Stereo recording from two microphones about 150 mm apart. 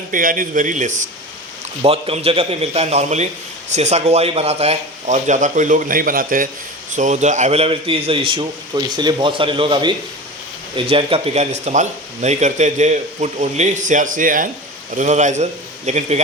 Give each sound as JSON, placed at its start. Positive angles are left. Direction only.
{"t": 0.1, "sound": "a man's voice", "side_deg": -65}
{"t": 1.8, "sound": "speech", "side_deg": -40}
{"t": 6.9, "sound": "a man's voice", "side_deg": -55}
{"t": 14.9, "sound": "speech", "side_deg": -55}